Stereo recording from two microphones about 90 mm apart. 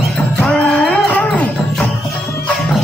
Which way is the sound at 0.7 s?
15° left (ahead or behind).